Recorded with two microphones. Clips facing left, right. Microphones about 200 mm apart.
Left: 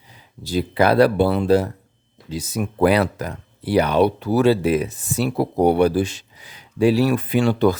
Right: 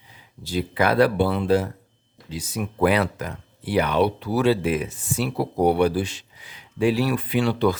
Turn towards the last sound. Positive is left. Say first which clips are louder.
# left 4 dB
turn(degrees=45)  # may be behind; listen again after turning